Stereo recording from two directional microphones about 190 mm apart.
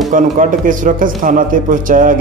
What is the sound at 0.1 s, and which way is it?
A man's voice, 45° right (ahead or behind).